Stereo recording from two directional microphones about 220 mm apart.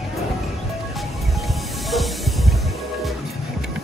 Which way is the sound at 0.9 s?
Centre (ahead or behind).